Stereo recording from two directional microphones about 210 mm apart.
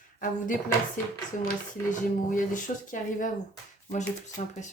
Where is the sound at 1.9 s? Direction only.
40° left (ahead or behind).